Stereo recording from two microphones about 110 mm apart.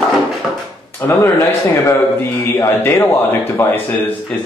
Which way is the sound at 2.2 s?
25° left (ahead or behind).